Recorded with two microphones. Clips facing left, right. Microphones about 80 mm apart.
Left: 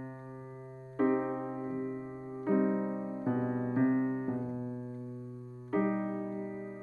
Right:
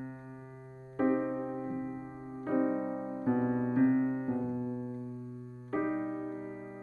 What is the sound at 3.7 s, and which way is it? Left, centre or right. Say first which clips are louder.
Piano: right 1 dB; left.